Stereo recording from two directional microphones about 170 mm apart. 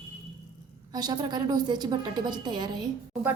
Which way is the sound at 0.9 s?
25° right (ahead or behind).